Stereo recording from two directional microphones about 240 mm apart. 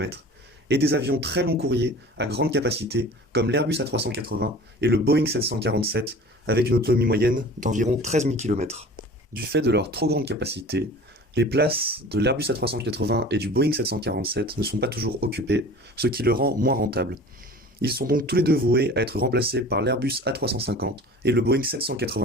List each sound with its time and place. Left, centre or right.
0.7 s speech: right
9.3 s speech: right